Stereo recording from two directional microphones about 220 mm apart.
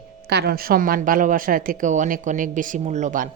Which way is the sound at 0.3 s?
45° right (ahead or behind).